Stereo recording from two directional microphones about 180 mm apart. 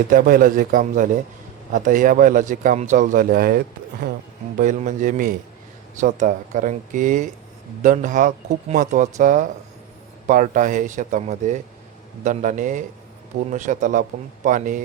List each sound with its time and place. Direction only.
0.1 s a man's voice: 50° right (ahead or behind)